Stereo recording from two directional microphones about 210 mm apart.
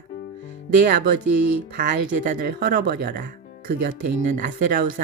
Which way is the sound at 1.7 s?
45° right (ahead or behind).